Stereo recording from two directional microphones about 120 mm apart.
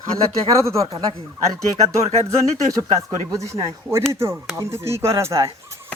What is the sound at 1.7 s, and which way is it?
Speech, 65° right (ahead or behind).